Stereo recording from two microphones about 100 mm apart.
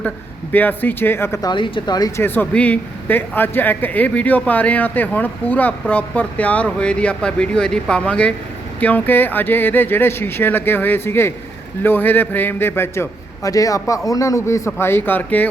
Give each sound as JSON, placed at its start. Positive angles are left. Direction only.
{"t": 0.5, "sound": "a man's voice", "side_deg": 20}
{"t": 1.4, "sound": "speech", "side_deg": 50}
{"t": 2.1, "sound": "a man's voice", "side_deg": 20}